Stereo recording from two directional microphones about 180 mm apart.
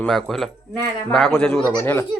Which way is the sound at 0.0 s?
Centre (ahead or behind).